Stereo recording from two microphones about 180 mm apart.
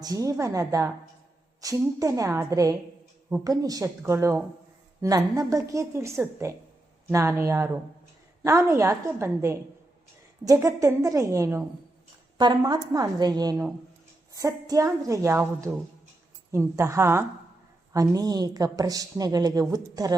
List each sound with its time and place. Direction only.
0.0 s a woman's voice: 20° right (ahead or behind)